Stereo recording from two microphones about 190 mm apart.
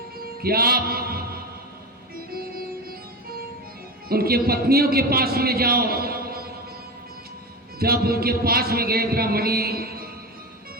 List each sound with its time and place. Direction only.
0.4 s music: 55° right (ahead or behind)
4.1 s a man's voice: 50° right (ahead or behind)
7.8 s a man's voice: 55° right (ahead or behind)